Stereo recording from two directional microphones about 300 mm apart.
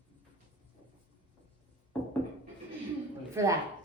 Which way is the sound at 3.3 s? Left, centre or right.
Centre.